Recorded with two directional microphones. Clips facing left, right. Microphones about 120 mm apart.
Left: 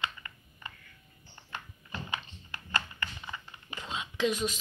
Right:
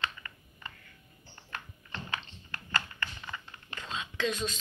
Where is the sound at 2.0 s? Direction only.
15° left (ahead or behind).